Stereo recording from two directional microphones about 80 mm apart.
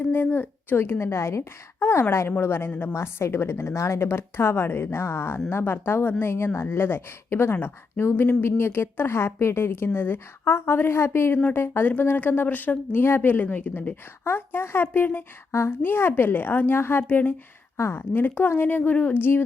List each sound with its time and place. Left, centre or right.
0.1 s a woman's voice: left
17.7 s a woman's voice: left